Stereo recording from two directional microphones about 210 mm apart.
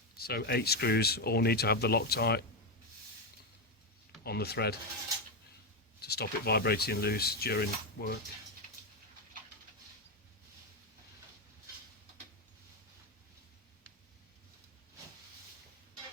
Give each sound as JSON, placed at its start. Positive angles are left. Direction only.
{"t": 0.2, "sound": "mechanisms", "side_deg": 50}
{"t": 4.2, "sound": "mechanisms", "side_deg": 50}
{"t": 6.0, "sound": "mechanisms", "side_deg": 50}